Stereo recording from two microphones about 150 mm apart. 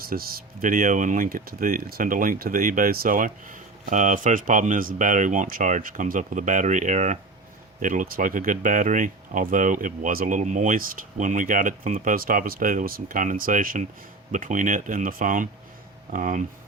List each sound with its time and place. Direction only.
0.0 s speech: 75° right (ahead or behind); by 16.4 s 55° right (ahead or behind)